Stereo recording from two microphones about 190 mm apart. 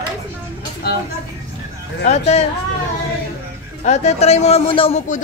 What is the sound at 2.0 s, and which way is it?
Speech, 35° left (ahead or behind).